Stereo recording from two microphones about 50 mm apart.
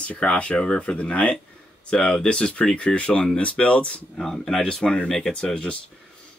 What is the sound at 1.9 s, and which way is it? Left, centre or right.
Speech, centre.